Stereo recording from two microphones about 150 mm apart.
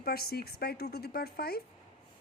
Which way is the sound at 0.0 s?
90° left.